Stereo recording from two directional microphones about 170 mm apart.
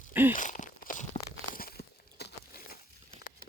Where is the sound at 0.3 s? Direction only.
50° left (ahead or behind); by 2.8 s 65° left (ahead or behind).